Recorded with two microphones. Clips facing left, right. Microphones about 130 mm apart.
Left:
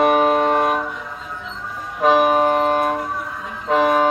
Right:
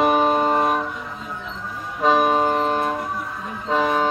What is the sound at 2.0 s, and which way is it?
Vehicle, 10° left (ahead or behind).